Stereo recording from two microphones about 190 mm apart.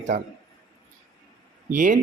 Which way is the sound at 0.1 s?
40° right (ahead or behind).